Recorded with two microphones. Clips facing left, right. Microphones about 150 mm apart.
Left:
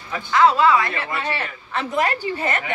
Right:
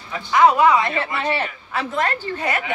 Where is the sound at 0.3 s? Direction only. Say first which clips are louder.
Right 1 dB; 15° right (ahead or behind).